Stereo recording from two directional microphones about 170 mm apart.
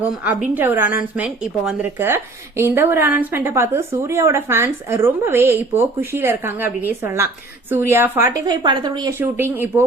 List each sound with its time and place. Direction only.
0.0 s a woman's voice: 10° right (ahead or behind)
8.4 s a woman's voice: 25° right (ahead or behind)